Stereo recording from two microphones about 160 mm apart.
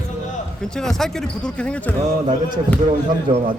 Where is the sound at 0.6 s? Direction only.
5° left (ahead or behind).